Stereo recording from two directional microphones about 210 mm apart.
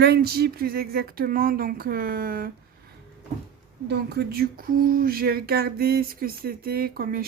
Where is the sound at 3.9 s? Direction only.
50° right (ahead or behind).